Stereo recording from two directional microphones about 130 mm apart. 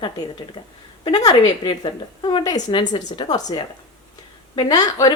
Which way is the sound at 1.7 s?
35° left (ahead or behind).